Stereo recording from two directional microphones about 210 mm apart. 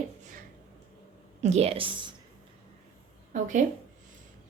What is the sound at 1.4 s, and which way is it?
Speech, 30° right (ahead or behind).